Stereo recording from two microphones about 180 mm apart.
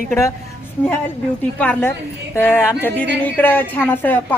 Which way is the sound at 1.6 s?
10° left (ahead or behind).